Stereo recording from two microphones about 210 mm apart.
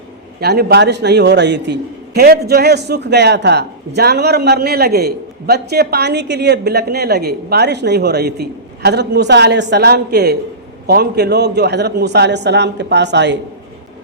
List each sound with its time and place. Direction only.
0.3 s a man's voice: 50° right (ahead or behind)